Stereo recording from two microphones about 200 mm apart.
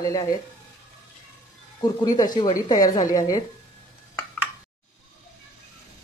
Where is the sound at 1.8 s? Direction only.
20° left (ahead or behind).